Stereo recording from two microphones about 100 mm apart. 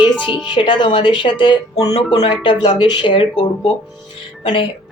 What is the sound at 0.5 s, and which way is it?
A woman's voice, 55° left (ahead or behind).